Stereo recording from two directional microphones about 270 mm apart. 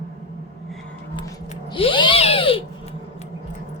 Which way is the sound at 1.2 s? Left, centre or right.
Centre.